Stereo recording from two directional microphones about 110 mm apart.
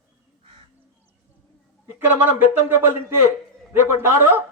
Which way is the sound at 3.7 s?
20° right (ahead or behind).